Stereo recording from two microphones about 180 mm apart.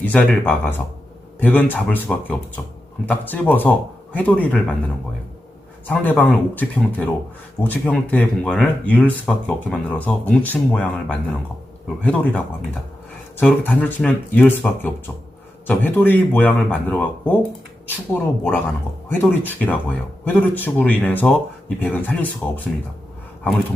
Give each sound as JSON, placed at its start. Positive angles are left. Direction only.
{"t": 0.0, "sound": "speech", "side_deg": 10}
{"t": 5.9, "sound": "speech", "side_deg": 10}
{"t": 13.4, "sound": "speech", "side_deg": 10}